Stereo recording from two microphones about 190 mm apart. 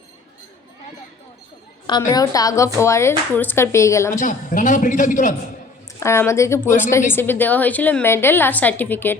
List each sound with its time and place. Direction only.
1.9 s a woman's voice: 20° left (ahead or behind)
4.1 s speech: 40° left (ahead or behind)
6.0 s a woman's voice: 15° left (ahead or behind)